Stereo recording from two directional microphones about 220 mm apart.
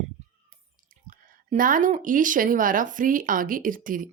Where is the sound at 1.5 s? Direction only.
40° right (ahead or behind).